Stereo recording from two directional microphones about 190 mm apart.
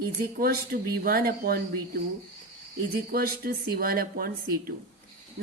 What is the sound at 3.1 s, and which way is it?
Speech, 50° right (ahead or behind).